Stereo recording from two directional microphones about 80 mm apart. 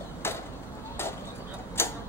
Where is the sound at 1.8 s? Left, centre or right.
Left.